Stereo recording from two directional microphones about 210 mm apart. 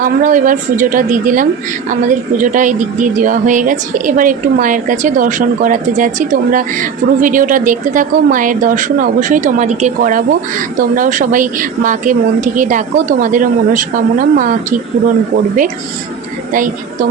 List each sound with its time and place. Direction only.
0.0 s speech: 40° right (ahead or behind)
16.5 s speech: 40° right (ahead or behind)